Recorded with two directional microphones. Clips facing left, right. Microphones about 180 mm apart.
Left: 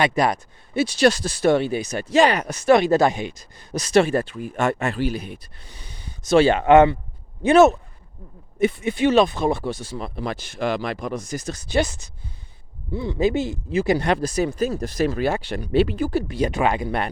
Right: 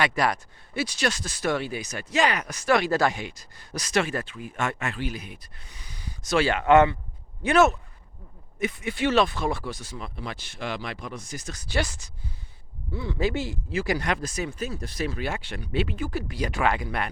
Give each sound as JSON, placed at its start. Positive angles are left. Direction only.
{"t": 0.0, "sound": "speech", "side_deg": 20}
{"t": 11.5, "sound": "speech", "side_deg": 20}